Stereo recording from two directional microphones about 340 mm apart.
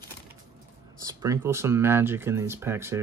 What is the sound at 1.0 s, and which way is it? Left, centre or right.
Speech, centre.